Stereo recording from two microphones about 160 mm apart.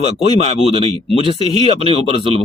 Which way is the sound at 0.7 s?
40° right (ahead or behind).